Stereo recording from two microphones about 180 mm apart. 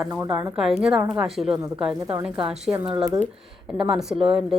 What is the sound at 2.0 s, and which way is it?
Speech, 20° right (ahead or behind).